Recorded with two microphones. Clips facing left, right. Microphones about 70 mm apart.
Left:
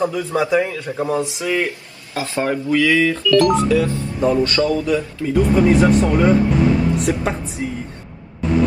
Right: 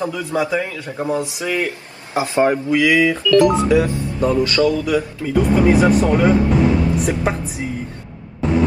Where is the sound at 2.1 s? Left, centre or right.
Right.